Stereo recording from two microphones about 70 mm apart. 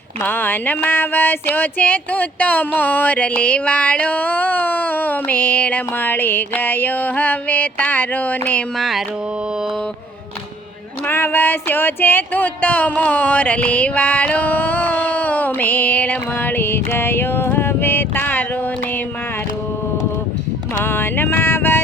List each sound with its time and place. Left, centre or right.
0.2 s a sound: left
8.8 s music: centre
11.0 s speech: left
20.8 s music: left